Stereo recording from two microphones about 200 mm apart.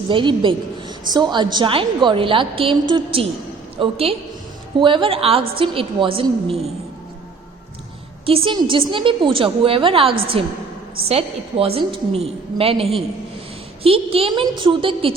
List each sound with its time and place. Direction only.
0.1 s a woman's voice: 25° right (ahead or behind)
8.3 s a woman's voice: 25° right (ahead or behind)